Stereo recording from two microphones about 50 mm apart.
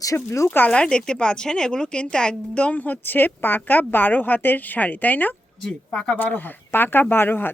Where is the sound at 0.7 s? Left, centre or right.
Centre; by 5.3 s left.